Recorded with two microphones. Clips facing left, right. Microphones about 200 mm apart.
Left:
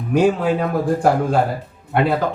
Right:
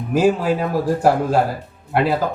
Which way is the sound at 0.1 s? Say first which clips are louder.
Left 1 dB; 5° right (ahead or behind).